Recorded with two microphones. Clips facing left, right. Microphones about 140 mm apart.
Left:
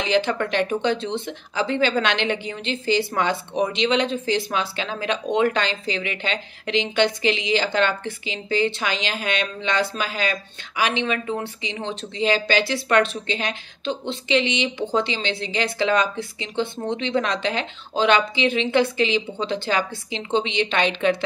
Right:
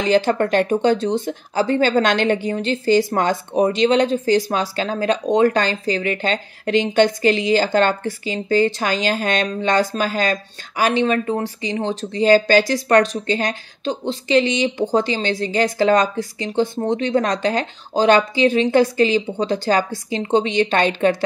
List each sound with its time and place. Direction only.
0.0 s speech: 40° right (ahead or behind)